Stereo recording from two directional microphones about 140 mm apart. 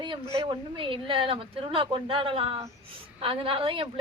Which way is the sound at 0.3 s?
35° right (ahead or behind).